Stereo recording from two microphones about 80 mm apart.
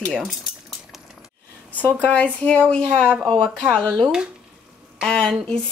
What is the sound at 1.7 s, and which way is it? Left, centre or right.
A woman's voice, centre.